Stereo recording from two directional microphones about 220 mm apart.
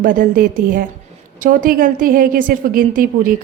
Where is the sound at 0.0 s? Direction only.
40° right (ahead or behind).